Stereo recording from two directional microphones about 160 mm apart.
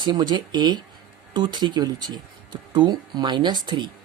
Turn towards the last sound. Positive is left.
turn(degrees=-30)  # may be behind; listen again after turning